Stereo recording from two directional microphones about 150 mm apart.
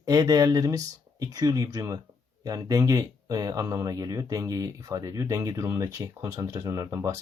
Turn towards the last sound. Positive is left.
turn(degrees=-20)  # may be behind; listen again after turning